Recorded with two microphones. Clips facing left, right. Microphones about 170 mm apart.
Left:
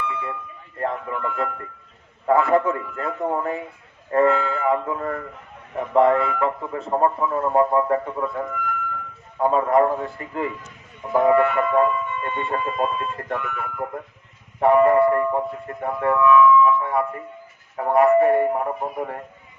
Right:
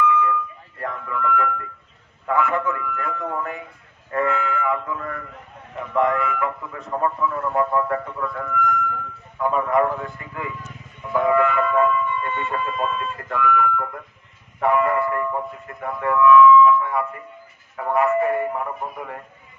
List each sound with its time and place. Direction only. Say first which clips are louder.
0.0 s a sound: right 9 dB; 30° left (ahead or behind)
2.2 s a man's voice: left 4 dB; 35° left (ahead or behind); by 13.0 s 15° left (ahead or behind)
13.1 s speech: right 6 dB; 30° left (ahead or behind)